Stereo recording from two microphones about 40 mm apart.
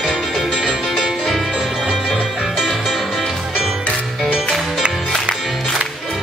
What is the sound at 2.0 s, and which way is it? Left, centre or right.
Music, centre.